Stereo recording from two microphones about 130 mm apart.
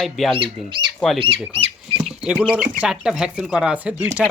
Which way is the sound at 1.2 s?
40° right (ahead or behind).